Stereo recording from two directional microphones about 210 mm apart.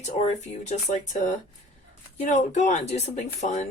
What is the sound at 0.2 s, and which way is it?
Speech, 30° left (ahead or behind).